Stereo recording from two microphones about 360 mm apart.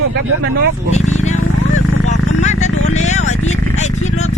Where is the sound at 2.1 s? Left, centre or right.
Centre.